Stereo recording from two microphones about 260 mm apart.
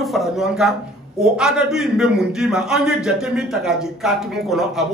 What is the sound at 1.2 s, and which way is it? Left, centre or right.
A man's voice, centre.